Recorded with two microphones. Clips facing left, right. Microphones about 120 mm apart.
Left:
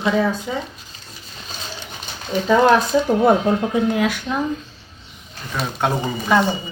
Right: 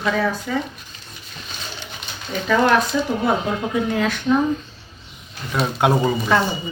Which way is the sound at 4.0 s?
10° left (ahead or behind).